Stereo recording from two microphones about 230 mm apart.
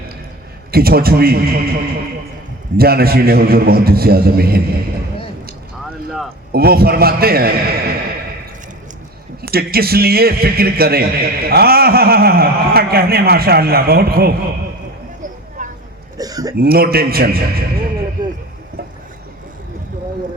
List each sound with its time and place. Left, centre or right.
0.7 s a man's voice: right
6.5 s a man's voice: right
9.4 s a man's voice: right
15.2 s a sound: right
16.1 s a sound: centre
16.6 s a man's voice: right